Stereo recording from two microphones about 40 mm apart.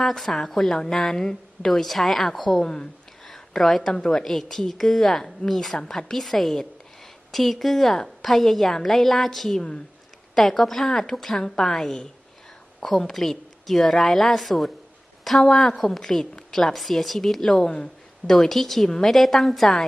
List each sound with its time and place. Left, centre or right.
0.0 s a woman's voice: centre
2.6 s speech: centre
3.2 s a woman's voice: centre
15.4 s a woman's voice: centre
16.7 s a woman's voice: centre
18.9 s a woman's voice: centre
19.1 s a woman's voice: centre